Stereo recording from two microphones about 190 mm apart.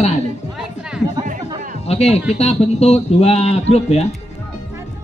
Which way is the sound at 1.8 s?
35° left (ahead or behind).